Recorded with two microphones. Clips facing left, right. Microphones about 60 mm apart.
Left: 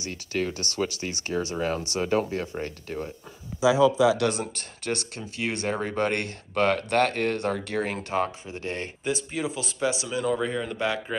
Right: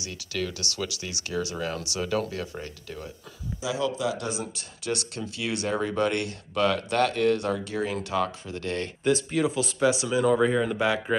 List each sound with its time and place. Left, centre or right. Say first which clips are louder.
0.0 s speech: left 3 dB; left
4.2 s speech: left 6 dB; left
8.5 s speech: right 2 dB; left
9.0 s speech: right 6 dB; centre